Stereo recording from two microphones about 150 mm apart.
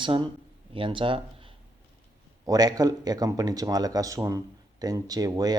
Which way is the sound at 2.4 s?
25° right (ahead or behind).